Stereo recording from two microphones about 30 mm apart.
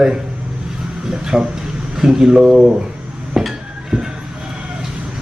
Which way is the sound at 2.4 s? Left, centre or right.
Right.